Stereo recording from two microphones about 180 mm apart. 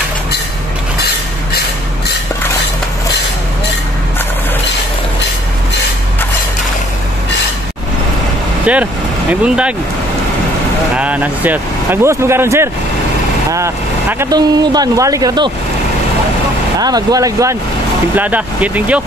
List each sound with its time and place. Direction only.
9.3 s speech: 5° right (ahead or behind)
11.0 s speech: 10° right (ahead or behind)
16.8 s speech: 20° right (ahead or behind)